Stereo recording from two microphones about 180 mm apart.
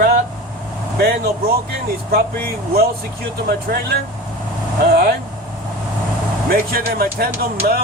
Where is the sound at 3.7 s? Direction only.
60° right (ahead or behind).